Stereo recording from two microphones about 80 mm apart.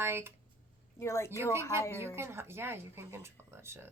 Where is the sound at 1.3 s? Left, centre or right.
Right.